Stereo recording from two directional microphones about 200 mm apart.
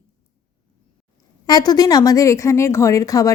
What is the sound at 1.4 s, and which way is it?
Speech, 20° left (ahead or behind).